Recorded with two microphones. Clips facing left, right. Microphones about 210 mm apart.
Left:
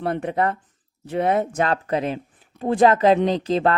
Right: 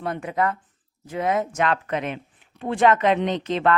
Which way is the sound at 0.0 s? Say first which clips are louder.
Left 3 dB; 30° left (ahead or behind).